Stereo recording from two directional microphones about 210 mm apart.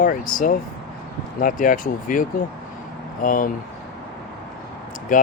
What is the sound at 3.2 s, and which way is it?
Speech, 40° left (ahead or behind).